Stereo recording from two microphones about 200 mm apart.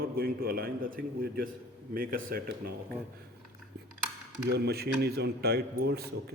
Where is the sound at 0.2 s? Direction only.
50° right (ahead or behind).